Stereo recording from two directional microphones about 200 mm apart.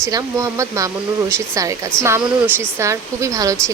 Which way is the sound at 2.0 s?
15° right (ahead or behind).